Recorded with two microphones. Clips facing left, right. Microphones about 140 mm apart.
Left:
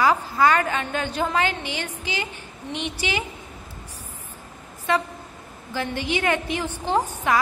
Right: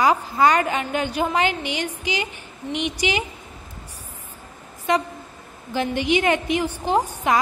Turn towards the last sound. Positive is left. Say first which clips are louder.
# right 2 dB
turn(degrees=-15)  # may be behind; listen again after turning